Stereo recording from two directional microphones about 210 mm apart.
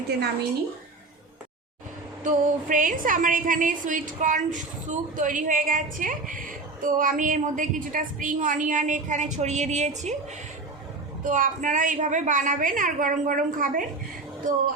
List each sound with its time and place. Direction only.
2.2 s a woman's voice: 40° right (ahead or behind)
11.2 s a woman's voice: 40° right (ahead or behind)